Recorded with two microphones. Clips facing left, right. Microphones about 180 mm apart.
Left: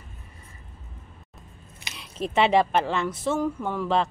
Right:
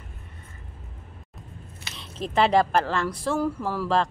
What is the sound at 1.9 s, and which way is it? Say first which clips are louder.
Squish: left 1 dB; 15° left (ahead or behind).